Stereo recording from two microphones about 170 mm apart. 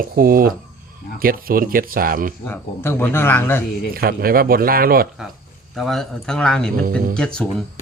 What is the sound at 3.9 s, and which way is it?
Speech, 60° right (ahead or behind).